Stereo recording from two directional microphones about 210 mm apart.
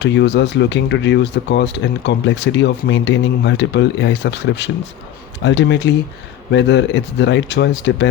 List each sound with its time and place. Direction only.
0.0 s speech: 55° left (ahead or behind)